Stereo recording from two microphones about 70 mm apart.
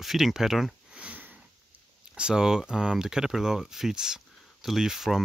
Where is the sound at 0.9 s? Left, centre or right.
Centre.